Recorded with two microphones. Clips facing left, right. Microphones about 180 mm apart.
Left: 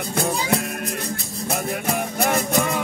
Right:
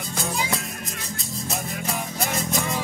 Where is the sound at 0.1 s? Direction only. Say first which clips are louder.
Left 6 dB; 60° left (ahead or behind).